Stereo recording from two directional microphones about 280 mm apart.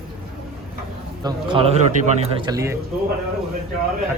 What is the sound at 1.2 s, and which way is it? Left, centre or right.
Bird, centre.